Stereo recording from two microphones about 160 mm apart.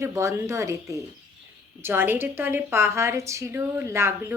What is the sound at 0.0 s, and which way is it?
A woman's voice, 15° right (ahead or behind).